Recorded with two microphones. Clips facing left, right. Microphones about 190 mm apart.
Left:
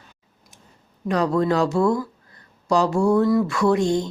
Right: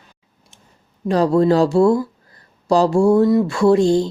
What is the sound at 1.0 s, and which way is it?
Speech, 30° right (ahead or behind).